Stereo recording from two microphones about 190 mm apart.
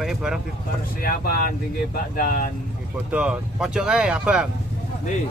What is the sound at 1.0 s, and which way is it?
Speech, 50° left (ahead or behind).